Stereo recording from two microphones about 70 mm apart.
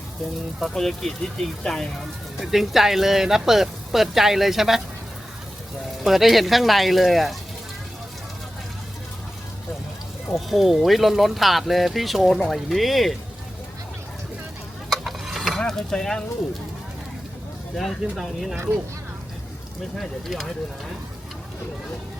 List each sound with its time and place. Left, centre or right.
0.6 s speech: centre
2.4 s speech: centre
6.0 s speech: centre
10.3 s speech: centre
14.8 s mechanisms: centre
17.7 s speech: centre
18.5 s speech: right
20.0 s speech: centre